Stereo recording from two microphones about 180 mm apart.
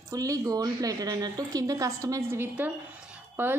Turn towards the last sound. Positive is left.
turn(degrees=-10)  # may be behind; listen again after turning